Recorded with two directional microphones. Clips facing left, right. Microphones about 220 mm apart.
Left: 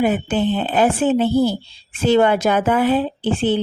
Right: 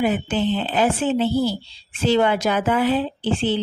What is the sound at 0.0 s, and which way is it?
A woman's voice, 55° left (ahead or behind).